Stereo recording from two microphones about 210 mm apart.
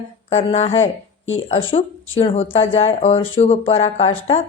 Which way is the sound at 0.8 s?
65° left (ahead or behind).